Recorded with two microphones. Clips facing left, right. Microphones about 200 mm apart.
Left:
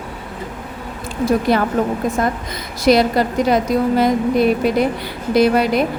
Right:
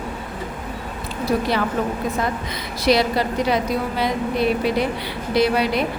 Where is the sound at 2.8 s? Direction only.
45° left (ahead or behind).